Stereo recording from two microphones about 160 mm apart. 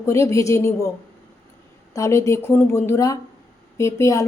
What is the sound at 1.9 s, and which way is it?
A woman's voice, 20° left (ahead or behind).